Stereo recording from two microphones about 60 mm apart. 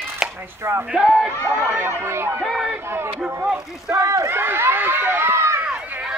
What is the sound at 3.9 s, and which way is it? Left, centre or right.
Run, right.